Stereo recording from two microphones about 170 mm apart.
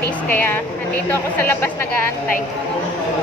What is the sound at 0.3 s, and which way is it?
A woman's voice, 10° left (ahead or behind).